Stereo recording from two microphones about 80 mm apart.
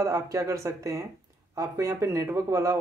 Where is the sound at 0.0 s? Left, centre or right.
Right.